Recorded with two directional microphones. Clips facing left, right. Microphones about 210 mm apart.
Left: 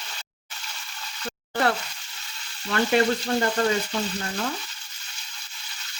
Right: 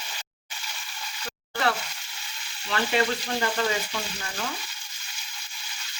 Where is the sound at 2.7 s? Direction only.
45° left (ahead or behind).